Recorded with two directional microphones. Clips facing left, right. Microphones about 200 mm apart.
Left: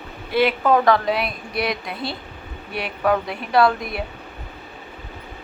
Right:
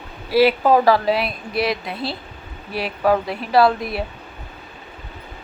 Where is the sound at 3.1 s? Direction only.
Centre (ahead or behind).